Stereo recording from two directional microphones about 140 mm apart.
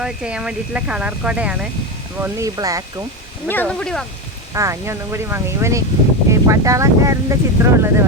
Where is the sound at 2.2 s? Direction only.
25° right (ahead or behind).